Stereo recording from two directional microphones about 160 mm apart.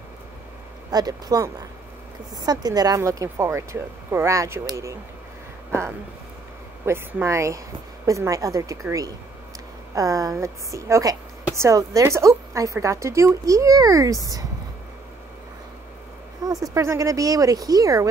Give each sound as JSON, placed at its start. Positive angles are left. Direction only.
{"t": 0.9, "sound": "a woman's voice", "side_deg": -20}
{"t": 6.9, "sound": "a woman's voice", "side_deg": -15}
{"t": 16.4, "sound": "a woman's voice", "side_deg": -25}